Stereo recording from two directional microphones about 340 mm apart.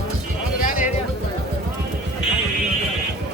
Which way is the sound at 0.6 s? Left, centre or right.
Left.